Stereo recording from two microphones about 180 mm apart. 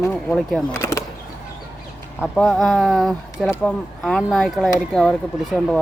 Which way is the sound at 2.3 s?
5° left (ahead or behind).